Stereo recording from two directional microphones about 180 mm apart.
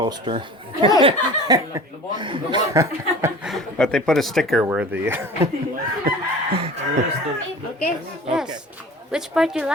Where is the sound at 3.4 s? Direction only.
Centre (ahead or behind).